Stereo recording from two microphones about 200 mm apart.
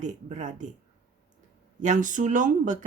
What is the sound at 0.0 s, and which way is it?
Speech, 35° right (ahead or behind).